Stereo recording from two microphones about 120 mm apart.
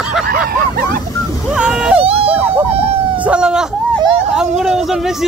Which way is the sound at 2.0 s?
55° right (ahead or behind).